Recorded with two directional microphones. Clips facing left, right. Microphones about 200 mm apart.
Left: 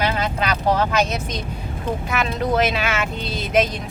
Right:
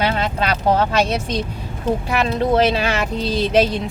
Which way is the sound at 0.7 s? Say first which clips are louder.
Right 2 dB; 30° right (ahead or behind).